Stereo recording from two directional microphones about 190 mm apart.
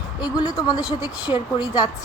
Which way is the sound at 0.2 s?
20° left (ahead or behind).